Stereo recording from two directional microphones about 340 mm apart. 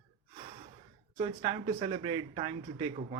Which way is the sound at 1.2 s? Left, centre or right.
Centre.